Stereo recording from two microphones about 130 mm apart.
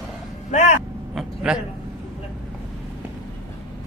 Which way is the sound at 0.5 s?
65° left (ahead or behind).